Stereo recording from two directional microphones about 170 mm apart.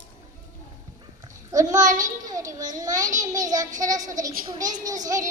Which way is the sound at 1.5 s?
20° right (ahead or behind).